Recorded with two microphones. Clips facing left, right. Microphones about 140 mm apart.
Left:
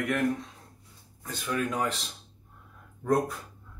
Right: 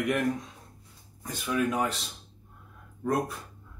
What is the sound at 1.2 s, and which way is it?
Speech, 10° right (ahead or behind).